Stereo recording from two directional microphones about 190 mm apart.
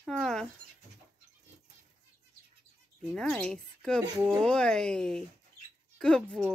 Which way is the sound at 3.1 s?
5° left (ahead or behind).